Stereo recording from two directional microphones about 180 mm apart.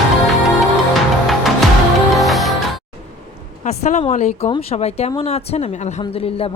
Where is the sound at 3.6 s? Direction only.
40° left (ahead or behind).